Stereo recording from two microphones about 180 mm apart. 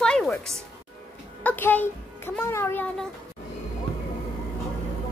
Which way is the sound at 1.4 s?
10° left (ahead or behind).